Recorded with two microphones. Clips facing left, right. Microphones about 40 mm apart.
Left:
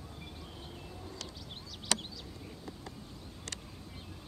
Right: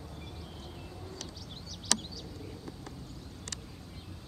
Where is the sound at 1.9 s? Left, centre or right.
Left.